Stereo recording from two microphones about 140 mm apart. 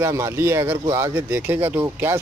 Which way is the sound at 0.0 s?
20° right (ahead or behind).